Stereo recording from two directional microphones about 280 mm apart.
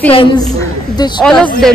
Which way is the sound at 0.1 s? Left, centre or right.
Centre.